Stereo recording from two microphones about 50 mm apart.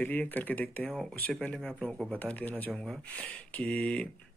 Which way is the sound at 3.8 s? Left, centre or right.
Centre.